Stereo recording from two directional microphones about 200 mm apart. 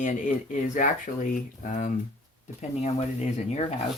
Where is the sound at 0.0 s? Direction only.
40° left (ahead or behind).